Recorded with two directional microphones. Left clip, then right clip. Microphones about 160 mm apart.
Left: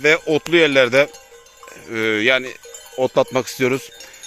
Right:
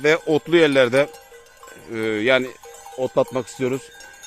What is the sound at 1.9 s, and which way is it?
Speech, 5° right (ahead or behind).